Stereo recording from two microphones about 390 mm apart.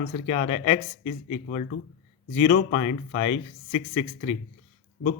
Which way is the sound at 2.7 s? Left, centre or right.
Centre.